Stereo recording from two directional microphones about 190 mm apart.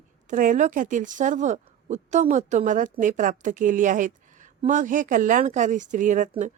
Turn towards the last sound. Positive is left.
turn(degrees=-40)  # may be behind; listen again after turning